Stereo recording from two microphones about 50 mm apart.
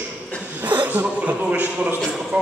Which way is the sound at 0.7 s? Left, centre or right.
Right.